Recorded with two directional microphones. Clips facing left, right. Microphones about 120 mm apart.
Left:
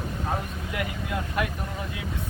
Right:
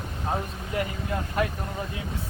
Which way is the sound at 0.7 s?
35° right (ahead or behind).